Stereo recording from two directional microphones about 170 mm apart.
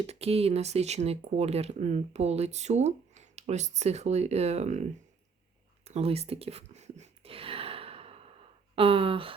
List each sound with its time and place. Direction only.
0.1 s speech: 35° right (ahead or behind)
5.8 s whispering: 35° right (ahead or behind)
8.7 s speech: 30° right (ahead or behind)